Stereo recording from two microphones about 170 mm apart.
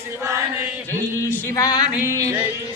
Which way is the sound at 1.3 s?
20° left (ahead or behind).